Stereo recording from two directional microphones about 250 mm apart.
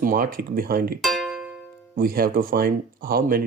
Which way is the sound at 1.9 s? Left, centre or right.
Right.